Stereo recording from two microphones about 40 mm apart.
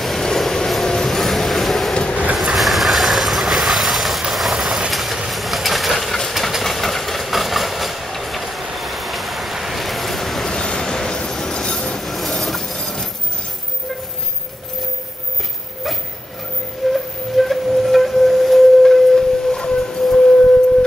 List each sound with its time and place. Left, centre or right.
0.0 s vehicle: centre
6.1 s train: centre
6.6 s vehicle: centre
10.5 s train: centre
11.6 s train: left
12.0 s vehicle: centre
16.9 s a sound: centre